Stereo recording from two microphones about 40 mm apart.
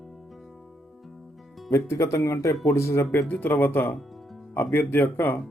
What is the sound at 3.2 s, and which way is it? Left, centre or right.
Speech, left.